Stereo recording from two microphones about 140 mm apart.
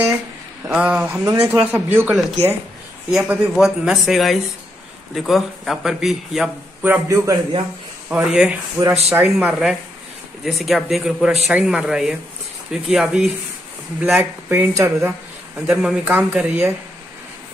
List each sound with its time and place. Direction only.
0.7 s a man's voice: 10° right (ahead or behind)
6.9 s a man's voice: 20° right (ahead or behind)
8.1 s a man's voice: 5° right (ahead or behind)